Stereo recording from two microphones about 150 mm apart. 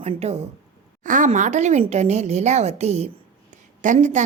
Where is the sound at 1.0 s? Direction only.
60° right (ahead or behind).